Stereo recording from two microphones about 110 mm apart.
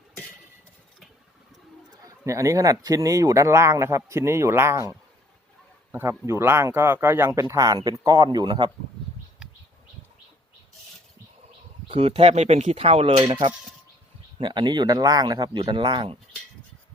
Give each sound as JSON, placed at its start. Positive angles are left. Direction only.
{"t": 2.0, "sound": "speech", "side_deg": -30}
{"t": 11.9, "sound": "speech", "side_deg": -60}
{"t": 14.3, "sound": "speech", "side_deg": -45}